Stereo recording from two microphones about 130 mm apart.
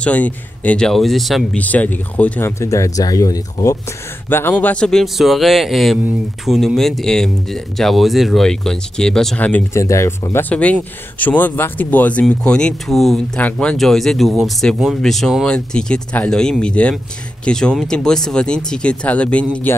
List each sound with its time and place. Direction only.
0.0 s speech: 10° left (ahead or behind)
1.6 s speech: 10° left (ahead or behind); by 3.7 s 25° left (ahead or behind)
4.3 s speech: 15° left (ahead or behind)
9.8 s speech: 25° left (ahead or behind)
10.5 s speech: 10° left (ahead or behind)